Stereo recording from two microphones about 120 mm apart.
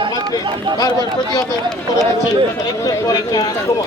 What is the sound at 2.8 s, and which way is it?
Speech, 30° left (ahead or behind).